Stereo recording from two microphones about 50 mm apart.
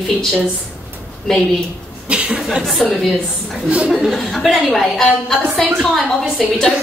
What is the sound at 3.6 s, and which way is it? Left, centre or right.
Speech, right.